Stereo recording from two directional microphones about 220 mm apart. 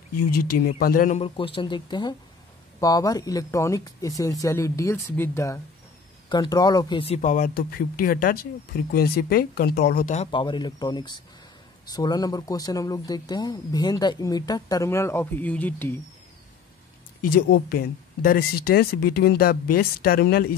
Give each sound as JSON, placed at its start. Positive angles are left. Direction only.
{"t": 0.3, "sound": "speech", "side_deg": 40}
{"t": 17.3, "sound": "speech", "side_deg": 45}